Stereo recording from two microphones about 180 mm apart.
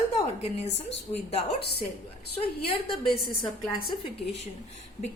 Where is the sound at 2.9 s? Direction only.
25° left (ahead or behind).